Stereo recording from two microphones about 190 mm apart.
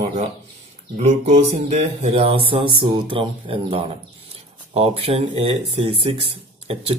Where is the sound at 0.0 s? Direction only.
35° right (ahead or behind).